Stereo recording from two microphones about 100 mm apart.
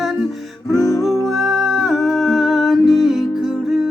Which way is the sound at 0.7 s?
35° left (ahead or behind).